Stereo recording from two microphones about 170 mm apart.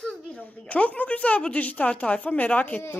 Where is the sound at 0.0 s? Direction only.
5° left (ahead or behind).